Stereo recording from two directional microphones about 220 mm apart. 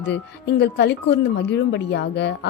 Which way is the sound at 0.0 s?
50° left (ahead or behind).